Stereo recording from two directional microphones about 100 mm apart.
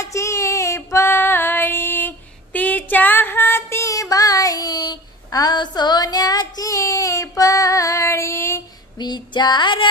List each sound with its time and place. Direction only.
0.0 s child singing: 30° left (ahead or behind)
0.9 s female singing: 25° left (ahead or behind)
8.9 s female singing: 45° left (ahead or behind)